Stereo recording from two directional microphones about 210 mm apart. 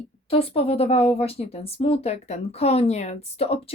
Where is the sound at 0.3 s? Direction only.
25° left (ahead or behind).